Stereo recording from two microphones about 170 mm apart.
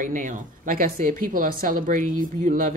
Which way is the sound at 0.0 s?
50° right (ahead or behind).